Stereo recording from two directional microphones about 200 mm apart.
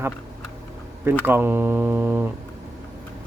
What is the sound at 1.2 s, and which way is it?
Speech, 10° right (ahead or behind).